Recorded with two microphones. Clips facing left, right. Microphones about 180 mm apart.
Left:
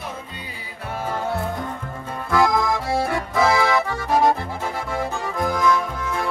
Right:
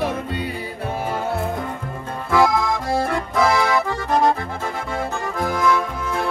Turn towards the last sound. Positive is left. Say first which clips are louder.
# right 2 dB
turn(degrees=-5)  # may be behind; listen again after turning